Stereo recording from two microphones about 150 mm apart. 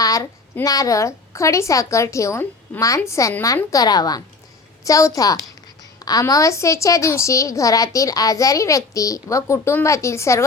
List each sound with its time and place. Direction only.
0.0 s a woman's voice: 20° left (ahead or behind)